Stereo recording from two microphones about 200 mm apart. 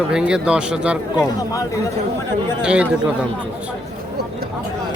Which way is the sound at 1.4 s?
15° left (ahead or behind).